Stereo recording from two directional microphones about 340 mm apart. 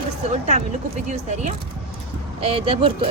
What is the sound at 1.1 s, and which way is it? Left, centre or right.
Speech, right.